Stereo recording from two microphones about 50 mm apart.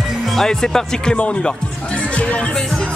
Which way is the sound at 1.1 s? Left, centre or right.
Left.